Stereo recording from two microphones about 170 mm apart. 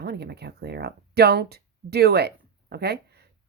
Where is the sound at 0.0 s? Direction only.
75° right (ahead or behind).